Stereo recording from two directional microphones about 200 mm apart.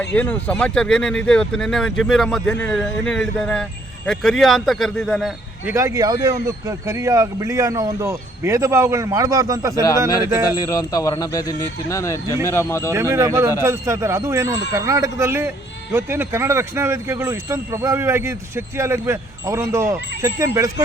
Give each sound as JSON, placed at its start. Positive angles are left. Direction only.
{"t": 0.1, "sound": "speech", "side_deg": 10}
{"t": 5.6, "sound": "a man's voice", "side_deg": -15}
{"t": 10.5, "sound": "speech", "side_deg": 20}
{"t": 12.9, "sound": "a man's voice", "side_deg": -15}